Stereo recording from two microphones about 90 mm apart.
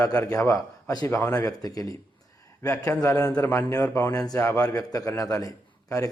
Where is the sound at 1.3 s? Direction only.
40° left (ahead or behind).